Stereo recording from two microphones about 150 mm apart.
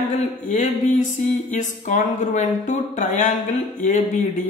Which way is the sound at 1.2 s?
60° left (ahead or behind).